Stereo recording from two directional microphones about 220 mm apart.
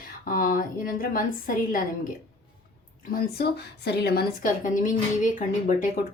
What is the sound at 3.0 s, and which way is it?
A woman's voice, 40° left (ahead or behind).